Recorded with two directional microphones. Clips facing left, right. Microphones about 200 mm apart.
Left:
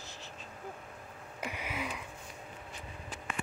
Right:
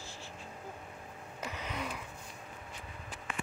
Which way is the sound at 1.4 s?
10° left (ahead or behind).